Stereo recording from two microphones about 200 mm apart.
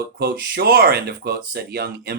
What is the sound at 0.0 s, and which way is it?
Speech, 55° right (ahead or behind).